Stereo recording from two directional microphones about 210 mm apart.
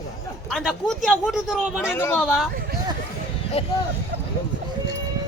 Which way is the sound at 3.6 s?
25° left (ahead or behind).